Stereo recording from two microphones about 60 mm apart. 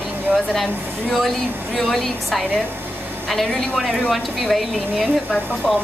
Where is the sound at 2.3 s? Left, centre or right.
Centre.